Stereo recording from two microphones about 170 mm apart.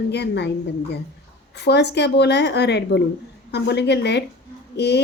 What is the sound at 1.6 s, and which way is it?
A woman's voice, 80° left.